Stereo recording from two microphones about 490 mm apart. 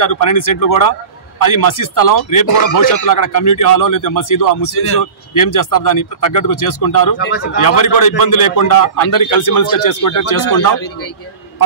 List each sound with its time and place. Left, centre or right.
0.0 s a man's voice: left